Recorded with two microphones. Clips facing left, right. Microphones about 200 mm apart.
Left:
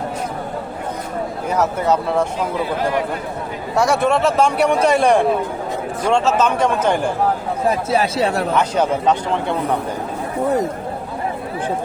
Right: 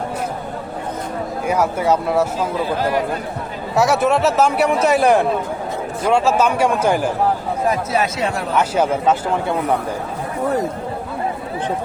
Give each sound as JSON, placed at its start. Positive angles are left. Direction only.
{"t": 1.5, "sound": "a man's voice", "side_deg": -10}
{"t": 3.8, "sound": "a man's voice", "side_deg": -5}
{"t": 7.7, "sound": "speech", "side_deg": 30}
{"t": 8.5, "sound": "a man's voice", "side_deg": -5}